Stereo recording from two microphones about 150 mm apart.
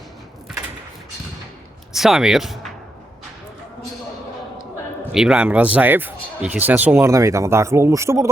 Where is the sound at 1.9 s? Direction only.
Centre (ahead or behind).